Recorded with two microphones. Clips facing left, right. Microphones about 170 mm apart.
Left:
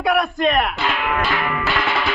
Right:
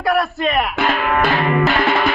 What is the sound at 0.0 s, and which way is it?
Music, centre (ahead or behind).